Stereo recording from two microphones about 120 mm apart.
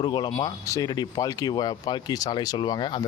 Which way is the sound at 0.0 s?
40° left (ahead or behind).